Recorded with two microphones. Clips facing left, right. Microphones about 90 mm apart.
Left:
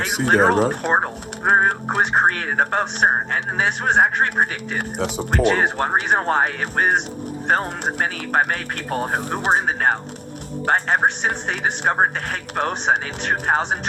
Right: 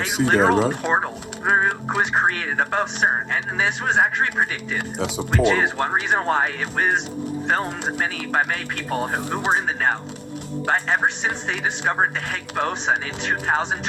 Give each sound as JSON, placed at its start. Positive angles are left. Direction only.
{"t": 0.0, "sound": "speech", "side_deg": 55}
{"t": 10.7, "sound": "speech", "side_deg": 55}